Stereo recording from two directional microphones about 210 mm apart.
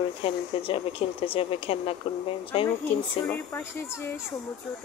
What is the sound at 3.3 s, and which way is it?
Speech, 10° left (ahead or behind).